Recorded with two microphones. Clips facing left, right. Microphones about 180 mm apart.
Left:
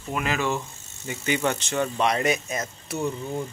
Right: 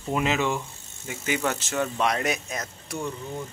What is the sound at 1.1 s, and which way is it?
Speech, 5° right (ahead or behind).